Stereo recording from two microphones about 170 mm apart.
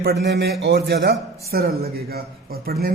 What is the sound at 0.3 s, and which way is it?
Speech, 85° right.